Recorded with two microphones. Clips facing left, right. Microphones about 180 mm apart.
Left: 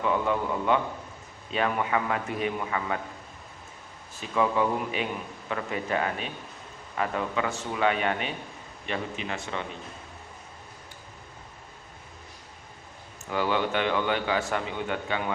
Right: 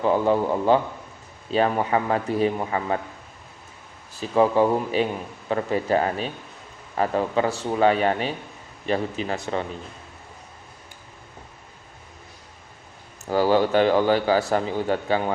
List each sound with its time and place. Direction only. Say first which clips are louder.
0.0 s a man's voice: right 6 dB; 35° right (ahead or behind)
4.2 s a man's voice: right 6 dB; 35° right (ahead or behind)
13.2 s a man's voice: right 7 dB; 35° right (ahead or behind)